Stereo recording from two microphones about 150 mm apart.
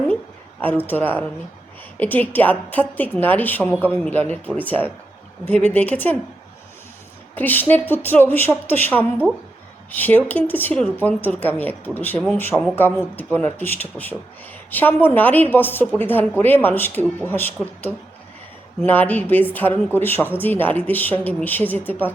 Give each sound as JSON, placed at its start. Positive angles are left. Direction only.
{"t": 0.6, "sound": "speech", "side_deg": 10}
{"t": 7.3, "sound": "speech", "side_deg": 10}